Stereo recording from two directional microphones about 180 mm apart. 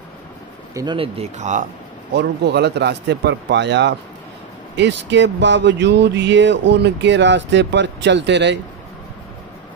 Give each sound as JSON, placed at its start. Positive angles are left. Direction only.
{"t": 0.7, "sound": "speech", "side_deg": -30}
{"t": 2.1, "sound": "speech", "side_deg": -70}